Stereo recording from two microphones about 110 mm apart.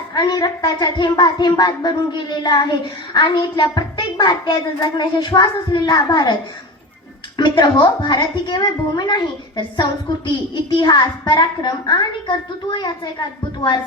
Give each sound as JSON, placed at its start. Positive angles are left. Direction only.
{"t": 0.1, "sound": "a child's voice", "side_deg": 40}
{"t": 7.3, "sound": "a child's voice", "side_deg": 45}